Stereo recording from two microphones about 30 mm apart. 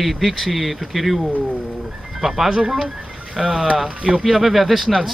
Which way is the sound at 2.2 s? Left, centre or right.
Centre.